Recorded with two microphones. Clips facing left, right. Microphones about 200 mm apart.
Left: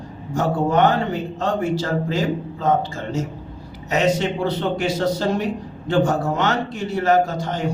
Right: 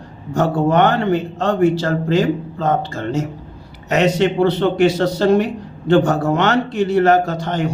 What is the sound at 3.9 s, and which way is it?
Speech, 65° right (ahead or behind).